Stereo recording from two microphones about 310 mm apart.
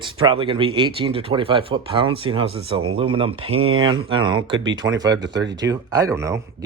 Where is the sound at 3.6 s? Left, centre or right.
Right.